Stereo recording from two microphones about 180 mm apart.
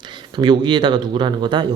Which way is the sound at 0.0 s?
25° right (ahead or behind).